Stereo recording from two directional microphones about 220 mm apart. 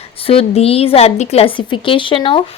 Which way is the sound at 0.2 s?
25° left (ahead or behind).